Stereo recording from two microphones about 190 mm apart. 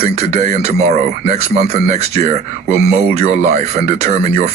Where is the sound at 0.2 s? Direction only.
35° right (ahead or behind).